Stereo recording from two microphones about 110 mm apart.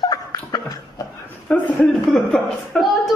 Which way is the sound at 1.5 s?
10° left (ahead or behind).